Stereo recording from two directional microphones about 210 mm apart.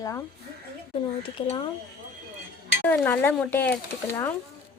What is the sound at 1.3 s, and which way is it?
Speech, 25° left (ahead or behind).